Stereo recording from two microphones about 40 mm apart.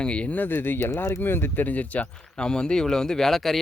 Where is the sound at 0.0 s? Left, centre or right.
Left.